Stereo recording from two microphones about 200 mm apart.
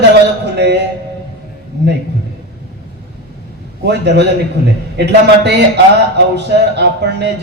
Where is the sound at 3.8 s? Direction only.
55° right (ahead or behind).